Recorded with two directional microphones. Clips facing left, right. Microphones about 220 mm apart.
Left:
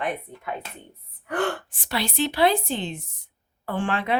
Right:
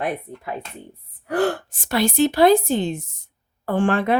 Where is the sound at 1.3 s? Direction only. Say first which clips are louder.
Right 5 dB; 35° right (ahead or behind).